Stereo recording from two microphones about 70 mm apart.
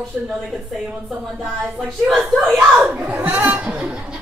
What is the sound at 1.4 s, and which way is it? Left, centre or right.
Speech, centre.